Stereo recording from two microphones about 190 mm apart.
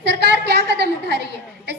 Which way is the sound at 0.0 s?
65° right (ahead or behind).